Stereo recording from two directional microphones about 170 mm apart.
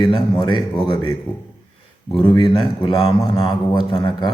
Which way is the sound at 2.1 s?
30° left (ahead or behind).